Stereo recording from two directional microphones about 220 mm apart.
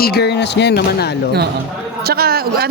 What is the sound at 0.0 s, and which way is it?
Speech, 45° left (ahead or behind).